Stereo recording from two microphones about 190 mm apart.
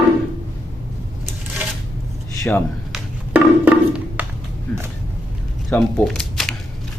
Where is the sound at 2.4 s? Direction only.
5° left (ahead or behind).